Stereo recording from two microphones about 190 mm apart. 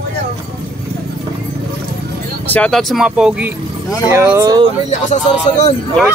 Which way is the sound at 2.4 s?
5° left (ahead or behind).